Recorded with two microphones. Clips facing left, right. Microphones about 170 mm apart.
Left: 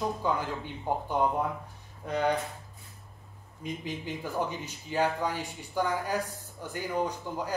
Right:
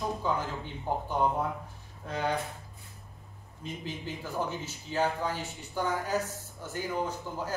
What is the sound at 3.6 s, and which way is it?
Speech, 15° left (ahead or behind).